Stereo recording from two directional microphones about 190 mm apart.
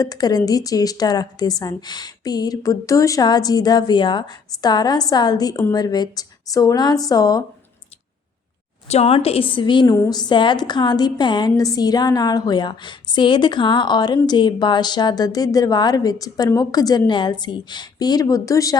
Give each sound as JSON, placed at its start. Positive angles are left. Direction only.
{"t": 0.0, "sound": "a woman's voice", "side_deg": 20}
{"t": 8.9, "sound": "a woman's voice", "side_deg": 30}